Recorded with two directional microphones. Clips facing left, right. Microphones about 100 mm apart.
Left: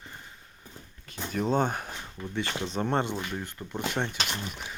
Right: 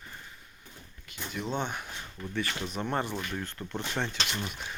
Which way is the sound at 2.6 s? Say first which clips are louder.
Left 6 dB; 30° left (ahead or behind).